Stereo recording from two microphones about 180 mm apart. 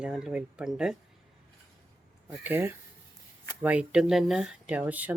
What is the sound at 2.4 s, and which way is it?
Speech, 10° right (ahead or behind).